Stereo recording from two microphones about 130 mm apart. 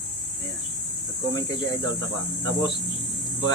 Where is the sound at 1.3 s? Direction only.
30° left (ahead or behind).